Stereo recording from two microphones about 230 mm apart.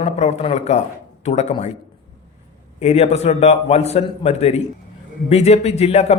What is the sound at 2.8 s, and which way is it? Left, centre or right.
Speech, left.